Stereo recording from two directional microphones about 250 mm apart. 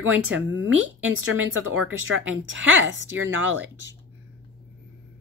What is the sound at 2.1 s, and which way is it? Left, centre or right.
Speech, right.